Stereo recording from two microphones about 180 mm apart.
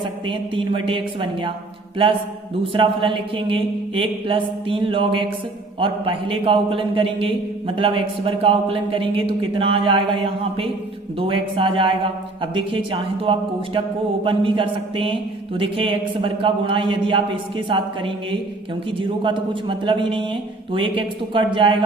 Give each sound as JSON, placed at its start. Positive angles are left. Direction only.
{"t": 0.3, "sound": "a man's voice", "side_deg": -30}
{"t": 2.7, "sound": "a man's voice", "side_deg": -30}
{"t": 11.2, "sound": "a man's voice", "side_deg": -30}